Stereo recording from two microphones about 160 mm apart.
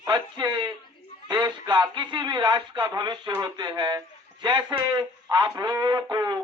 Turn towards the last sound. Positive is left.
turn(degrees=-25)  # may be behind; listen again after turning